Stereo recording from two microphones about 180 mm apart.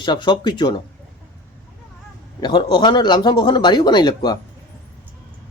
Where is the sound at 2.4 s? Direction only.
25° left (ahead or behind).